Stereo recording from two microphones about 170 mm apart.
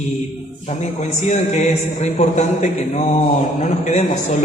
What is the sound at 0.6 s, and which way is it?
A man's voice, 40° left (ahead or behind).